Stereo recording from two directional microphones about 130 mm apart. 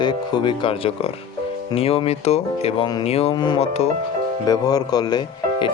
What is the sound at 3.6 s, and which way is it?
Speech, 55° left (ahead or behind).